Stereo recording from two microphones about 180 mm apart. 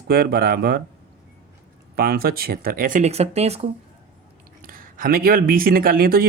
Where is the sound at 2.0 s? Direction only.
60° right (ahead or behind); by 3.7 s 35° right (ahead or behind).